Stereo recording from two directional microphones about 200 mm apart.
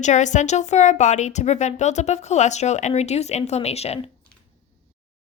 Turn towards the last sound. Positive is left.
turn(degrees=30)  # may be behind; listen again after turning